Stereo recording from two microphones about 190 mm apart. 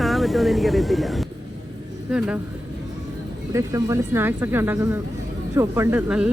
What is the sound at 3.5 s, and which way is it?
Speech, 15° right (ahead or behind).